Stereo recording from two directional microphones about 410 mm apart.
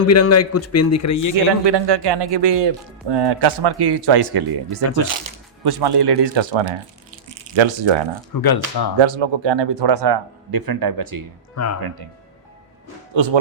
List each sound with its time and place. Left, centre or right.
0.0 s a man's voice: left
1.6 s speech: right
3.1 s speech: right
8.3 s speech: left
9.0 s speech: right
11.5 s a man's voice: left
13.1 s speech: right